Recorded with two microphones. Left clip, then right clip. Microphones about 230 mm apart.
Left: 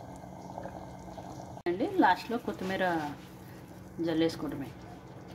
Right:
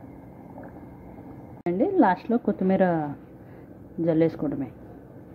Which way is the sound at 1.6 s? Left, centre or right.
Right.